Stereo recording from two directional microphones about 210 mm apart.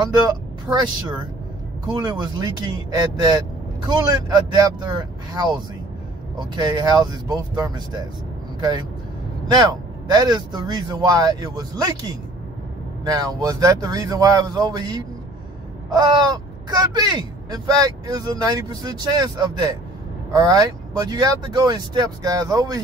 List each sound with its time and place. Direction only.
0.0 s speech: 20° right (ahead or behind)